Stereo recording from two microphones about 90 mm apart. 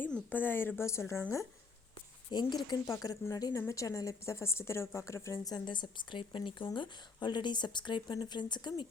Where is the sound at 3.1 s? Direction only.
40° left (ahead or behind).